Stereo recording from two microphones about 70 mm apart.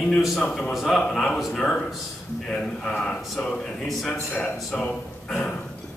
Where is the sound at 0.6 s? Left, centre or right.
Centre.